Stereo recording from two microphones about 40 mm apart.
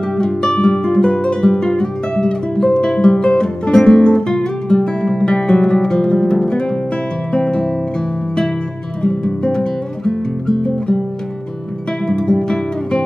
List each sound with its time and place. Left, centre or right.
0.2 s music: centre
7.3 s guitar: centre
9.0 s guitar: centre
12.1 s music: centre